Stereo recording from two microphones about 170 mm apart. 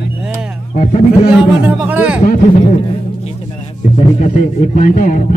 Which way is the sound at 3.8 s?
45° left (ahead or behind).